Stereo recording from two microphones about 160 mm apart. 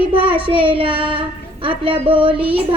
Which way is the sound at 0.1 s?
35° right (ahead or behind).